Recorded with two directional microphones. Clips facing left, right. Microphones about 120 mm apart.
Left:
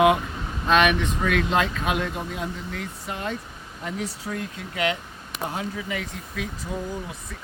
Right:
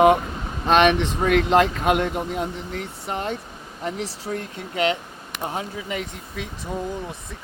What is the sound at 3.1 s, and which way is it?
Speech, 25° right (ahead or behind).